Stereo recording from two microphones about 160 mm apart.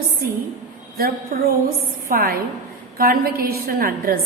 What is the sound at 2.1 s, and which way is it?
A woman's voice, 65° right (ahead or behind).